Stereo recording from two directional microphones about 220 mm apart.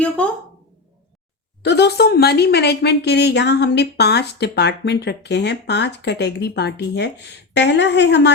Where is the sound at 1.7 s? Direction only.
50° left (ahead or behind).